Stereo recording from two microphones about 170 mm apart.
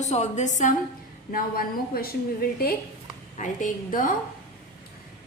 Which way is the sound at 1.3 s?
60° left (ahead or behind).